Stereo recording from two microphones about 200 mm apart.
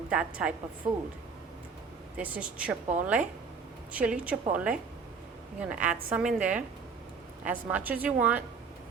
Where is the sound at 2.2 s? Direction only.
5° right (ahead or behind).